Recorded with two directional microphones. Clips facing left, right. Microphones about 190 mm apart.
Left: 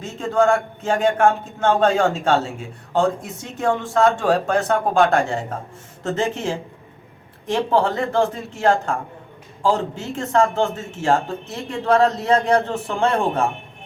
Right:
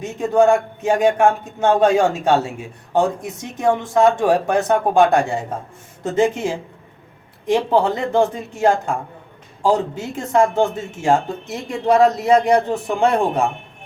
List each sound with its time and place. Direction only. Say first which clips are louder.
0.0 s a man's voice: right 3 dB; 15° right (ahead or behind)